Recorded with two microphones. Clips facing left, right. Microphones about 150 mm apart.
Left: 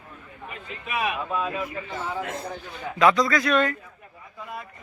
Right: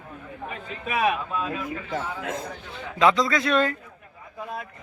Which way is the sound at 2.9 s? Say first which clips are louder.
Left 1 dB; 25° right (ahead or behind).